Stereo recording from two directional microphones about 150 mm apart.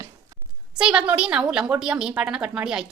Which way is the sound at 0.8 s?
5° right (ahead or behind).